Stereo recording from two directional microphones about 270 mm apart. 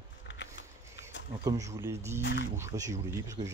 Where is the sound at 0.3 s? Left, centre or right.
Left.